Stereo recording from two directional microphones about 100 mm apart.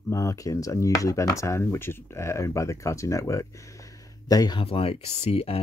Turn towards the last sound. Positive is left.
turn(degrees=85)